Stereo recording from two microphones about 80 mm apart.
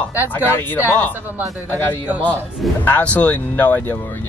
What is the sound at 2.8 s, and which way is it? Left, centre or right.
Speech, centre.